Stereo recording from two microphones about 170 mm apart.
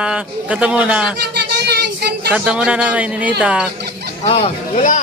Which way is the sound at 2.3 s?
5° right (ahead or behind).